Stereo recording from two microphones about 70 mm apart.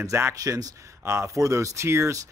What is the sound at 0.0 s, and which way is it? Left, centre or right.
Speech, right.